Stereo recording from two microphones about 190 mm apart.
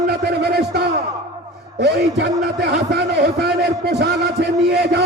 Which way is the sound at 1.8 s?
60° right (ahead or behind).